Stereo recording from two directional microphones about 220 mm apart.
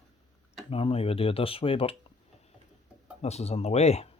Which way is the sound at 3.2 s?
30° left (ahead or behind).